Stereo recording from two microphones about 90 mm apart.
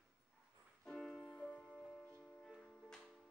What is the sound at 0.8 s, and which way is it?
Music, 5° left (ahead or behind).